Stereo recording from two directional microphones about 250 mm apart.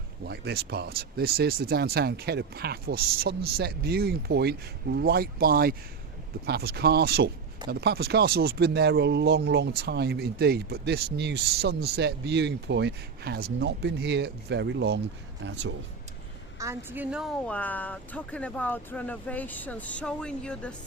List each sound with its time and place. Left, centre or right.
0.3 s speech: right
16.6 s speech: centre